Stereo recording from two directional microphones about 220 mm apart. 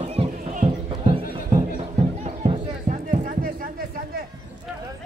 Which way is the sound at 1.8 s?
25° right (ahead or behind).